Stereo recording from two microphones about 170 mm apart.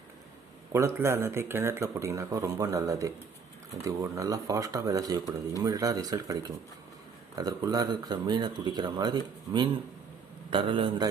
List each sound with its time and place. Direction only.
0.7 s speech: 15° right (ahead or behind)